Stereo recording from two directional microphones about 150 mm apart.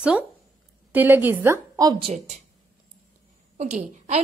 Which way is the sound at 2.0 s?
40° right (ahead or behind).